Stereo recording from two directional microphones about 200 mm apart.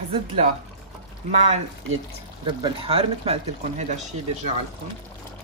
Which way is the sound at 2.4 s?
25° right (ahead or behind).